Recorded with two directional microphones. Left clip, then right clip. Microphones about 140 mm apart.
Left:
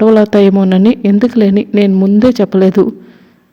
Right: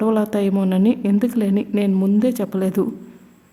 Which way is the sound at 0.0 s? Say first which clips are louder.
Left 12 dB; 35° left (ahead or behind).